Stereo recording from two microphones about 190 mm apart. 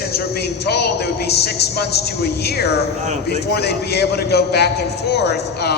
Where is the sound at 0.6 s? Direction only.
60° left (ahead or behind).